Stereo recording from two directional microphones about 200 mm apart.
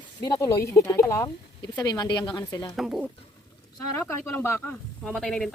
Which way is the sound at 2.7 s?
Centre (ahead or behind).